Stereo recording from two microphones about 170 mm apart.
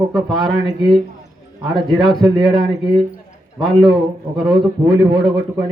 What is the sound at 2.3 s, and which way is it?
Speech, 30° right (ahead or behind).